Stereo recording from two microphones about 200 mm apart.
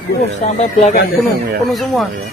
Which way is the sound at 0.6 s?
35° left (ahead or behind).